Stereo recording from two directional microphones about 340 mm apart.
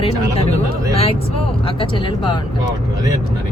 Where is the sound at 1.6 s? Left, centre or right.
Centre.